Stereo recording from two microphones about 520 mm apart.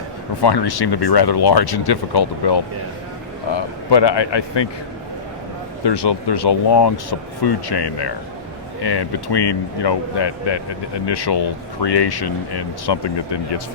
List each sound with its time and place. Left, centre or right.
0.4 s speech: left
5.8 s speech: left